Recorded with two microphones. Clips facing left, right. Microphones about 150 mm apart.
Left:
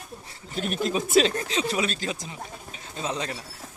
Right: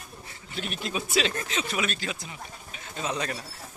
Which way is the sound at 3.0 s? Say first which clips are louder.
Even; 25° left (ahead or behind).